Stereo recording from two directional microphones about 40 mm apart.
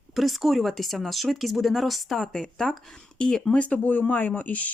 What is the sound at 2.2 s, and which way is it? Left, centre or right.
Speech, centre.